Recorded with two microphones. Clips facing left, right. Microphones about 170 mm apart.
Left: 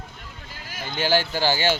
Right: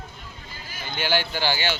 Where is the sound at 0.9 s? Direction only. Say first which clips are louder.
Left 3 dB; 40° left (ahead or behind).